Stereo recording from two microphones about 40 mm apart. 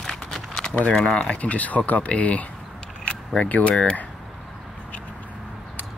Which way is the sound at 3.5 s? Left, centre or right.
Left.